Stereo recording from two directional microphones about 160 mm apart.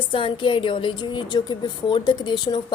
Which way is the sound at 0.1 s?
35° left (ahead or behind).